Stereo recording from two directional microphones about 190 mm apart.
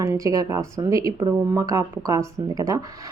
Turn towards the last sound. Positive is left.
turn(degrees=-20)  # may be behind; listen again after turning